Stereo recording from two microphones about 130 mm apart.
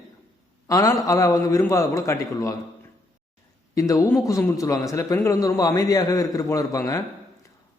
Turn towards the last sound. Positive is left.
turn(degrees=25)  # may be behind; listen again after turning